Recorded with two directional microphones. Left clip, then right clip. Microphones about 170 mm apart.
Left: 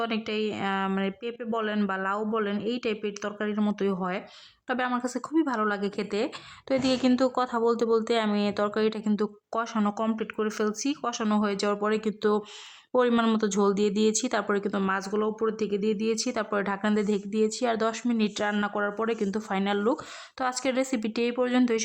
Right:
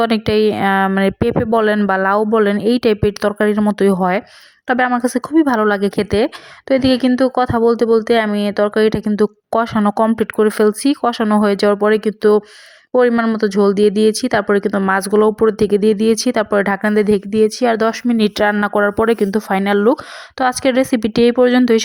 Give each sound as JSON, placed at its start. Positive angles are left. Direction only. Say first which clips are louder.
{"t": 0.0, "sound": "speech", "louder": "right 15 dB", "side_deg": -45}
{"t": 12.9, "sound": "speech", "louder": "right 10 dB", "side_deg": -20}
{"t": 13.4, "sound": "speech", "louder": "right 12 dB", "side_deg": -30}